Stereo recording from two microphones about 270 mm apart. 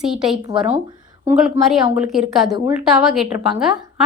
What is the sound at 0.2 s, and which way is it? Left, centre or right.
A woman's voice, centre.